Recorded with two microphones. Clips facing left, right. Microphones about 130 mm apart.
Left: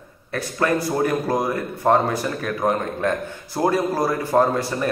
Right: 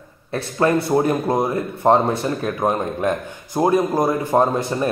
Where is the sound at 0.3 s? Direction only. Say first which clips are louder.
Right 3 dB; 25° right (ahead or behind).